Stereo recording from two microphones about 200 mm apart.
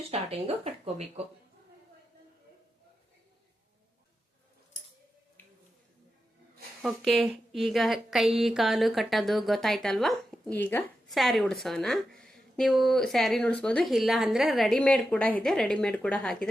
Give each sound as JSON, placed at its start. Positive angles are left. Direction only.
{"t": 0.1, "sound": "speech", "side_deg": -30}
{"t": 5.4, "sound": "a sound", "side_deg": 10}
{"t": 6.8, "sound": "a woman's voice", "side_deg": 0}